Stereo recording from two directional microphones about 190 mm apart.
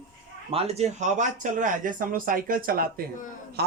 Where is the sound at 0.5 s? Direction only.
30° right (ahead or behind).